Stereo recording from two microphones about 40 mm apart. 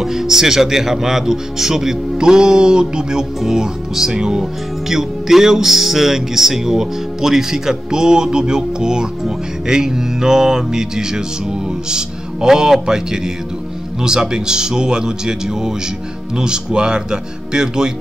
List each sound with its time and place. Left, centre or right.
0.0 s speech: centre